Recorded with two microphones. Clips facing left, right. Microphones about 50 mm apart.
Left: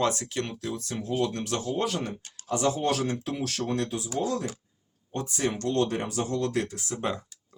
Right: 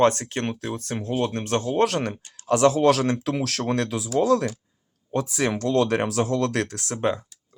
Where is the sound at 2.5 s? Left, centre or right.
Right.